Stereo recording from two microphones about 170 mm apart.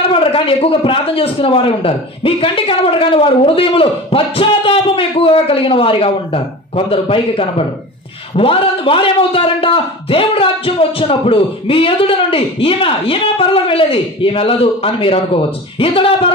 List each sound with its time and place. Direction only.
0.1 s a man's voice: 30° left (ahead or behind)